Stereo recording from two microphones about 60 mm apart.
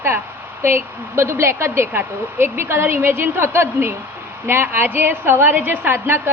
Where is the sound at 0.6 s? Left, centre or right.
Right.